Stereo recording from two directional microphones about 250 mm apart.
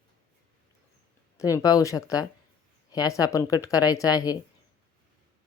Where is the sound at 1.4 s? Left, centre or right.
Centre.